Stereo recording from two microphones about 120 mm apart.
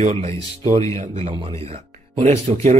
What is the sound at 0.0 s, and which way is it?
Speech, 70° right (ahead or behind).